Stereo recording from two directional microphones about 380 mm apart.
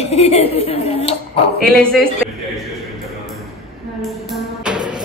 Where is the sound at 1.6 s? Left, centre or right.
Centre.